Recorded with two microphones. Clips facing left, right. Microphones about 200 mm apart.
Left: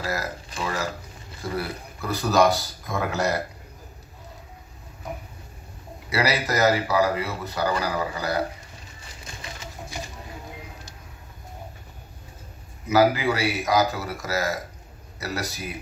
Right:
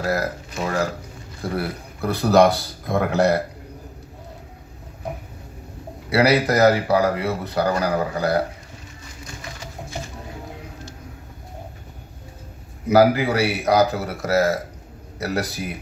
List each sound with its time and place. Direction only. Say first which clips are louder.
0.0 s speech: right 6 dB; 60° right (ahead or behind)
0.6 s speech: right 5 dB; 50° right (ahead or behind)
6.0 s speech: right 7 dB; 60° right (ahead or behind)
12.8 s a man's voice: right 4 dB; 60° right (ahead or behind)